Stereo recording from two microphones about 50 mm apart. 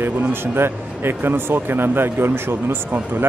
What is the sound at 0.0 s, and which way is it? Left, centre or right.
Speech, right.